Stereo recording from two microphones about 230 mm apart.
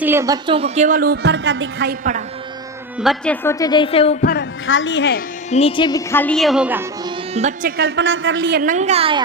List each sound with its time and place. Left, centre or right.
0.0 s a woman's voice: centre; by 2.0 s right
3.0 s a woman's voice: centre
3.4 s a woman's voice: centre
4.2 s speech: left
4.6 s a woman's voice: left
5.5 s a woman's voice: left; by 6.8 s centre
7.3 s a woman's voice: right
7.8 s a man's voice: right
8.6 s a woman's voice: right